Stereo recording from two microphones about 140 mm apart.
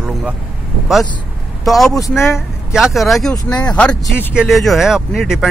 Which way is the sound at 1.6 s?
Centre (ahead or behind).